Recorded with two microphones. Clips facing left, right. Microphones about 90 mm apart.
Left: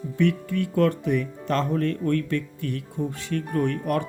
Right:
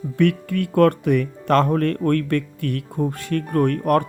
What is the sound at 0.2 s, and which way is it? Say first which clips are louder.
Speech: right 4 dB; 60° right (ahead or behind).